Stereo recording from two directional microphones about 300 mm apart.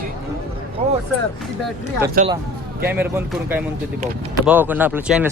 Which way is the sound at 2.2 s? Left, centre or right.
Right.